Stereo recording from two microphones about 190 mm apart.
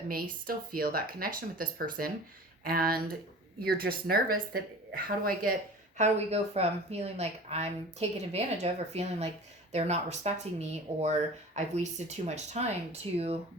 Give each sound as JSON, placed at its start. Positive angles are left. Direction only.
{"t": 0.1, "sound": "speech", "side_deg": -50}
{"t": 6.0, "sound": "speech", "side_deg": -35}